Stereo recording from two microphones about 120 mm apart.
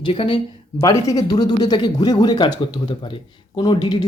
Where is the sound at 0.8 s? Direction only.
30° left (ahead or behind).